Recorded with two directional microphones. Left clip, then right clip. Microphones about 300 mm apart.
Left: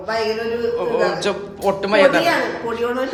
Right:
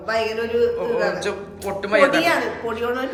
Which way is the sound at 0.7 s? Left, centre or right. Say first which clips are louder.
Left 3 dB; centre.